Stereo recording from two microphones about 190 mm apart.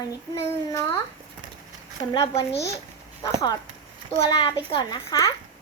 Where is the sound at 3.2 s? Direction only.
20° left (ahead or behind).